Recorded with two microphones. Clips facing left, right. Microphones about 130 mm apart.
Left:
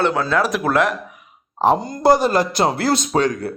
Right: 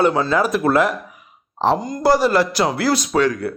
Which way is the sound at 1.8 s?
25° left (ahead or behind).